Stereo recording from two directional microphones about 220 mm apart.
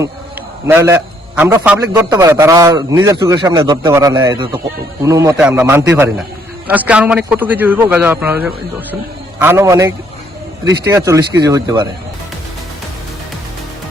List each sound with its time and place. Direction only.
0.7 s a man's voice: 10° right (ahead or behind)